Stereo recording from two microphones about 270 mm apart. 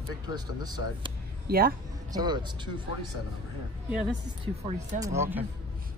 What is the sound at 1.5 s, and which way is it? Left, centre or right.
Speech, right.